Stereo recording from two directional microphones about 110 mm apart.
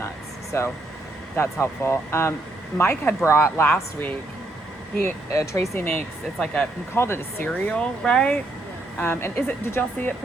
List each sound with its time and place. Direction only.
0.5 s speech: 25° left (ahead or behind)
6.4 s speech: 10° left (ahead or behind)
6.9 s speech: 20° left (ahead or behind)
7.7 s speech: 10° left (ahead or behind)
9.0 s speech: 20° left (ahead or behind)